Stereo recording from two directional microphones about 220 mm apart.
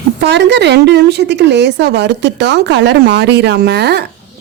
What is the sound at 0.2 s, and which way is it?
A woman's voice, 50° right (ahead or behind).